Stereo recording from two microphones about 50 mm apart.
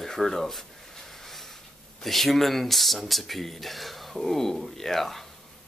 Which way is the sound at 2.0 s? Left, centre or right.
Centre.